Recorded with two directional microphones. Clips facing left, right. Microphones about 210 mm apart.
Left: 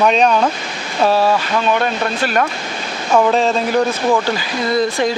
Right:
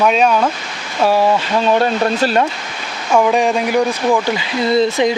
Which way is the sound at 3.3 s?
15° right (ahead or behind).